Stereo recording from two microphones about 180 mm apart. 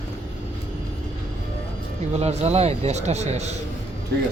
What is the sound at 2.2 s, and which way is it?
A man's voice, 35° right (ahead or behind).